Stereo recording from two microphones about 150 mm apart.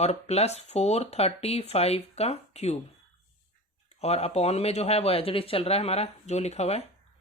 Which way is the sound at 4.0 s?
45° left (ahead or behind).